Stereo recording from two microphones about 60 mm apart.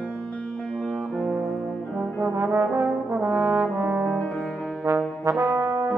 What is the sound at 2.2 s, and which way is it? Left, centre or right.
Brass instrument, right.